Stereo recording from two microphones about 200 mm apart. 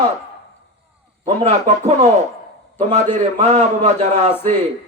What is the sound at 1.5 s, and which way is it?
A man's voice, 35° right (ahead or behind).